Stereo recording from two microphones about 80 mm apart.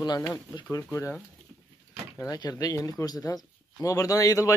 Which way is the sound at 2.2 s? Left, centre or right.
Left.